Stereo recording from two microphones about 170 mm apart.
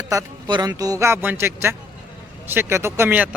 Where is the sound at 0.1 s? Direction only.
25° right (ahead or behind).